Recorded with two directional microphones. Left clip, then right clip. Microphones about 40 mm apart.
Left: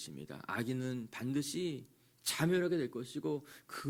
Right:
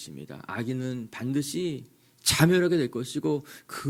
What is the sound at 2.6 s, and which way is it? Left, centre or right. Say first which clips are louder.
Speech: right 10 dB; right.